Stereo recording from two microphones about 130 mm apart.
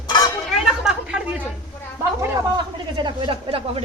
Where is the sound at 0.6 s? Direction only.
5° right (ahead or behind).